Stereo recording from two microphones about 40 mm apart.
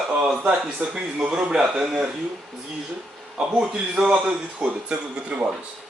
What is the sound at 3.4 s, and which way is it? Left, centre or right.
A man's voice, right.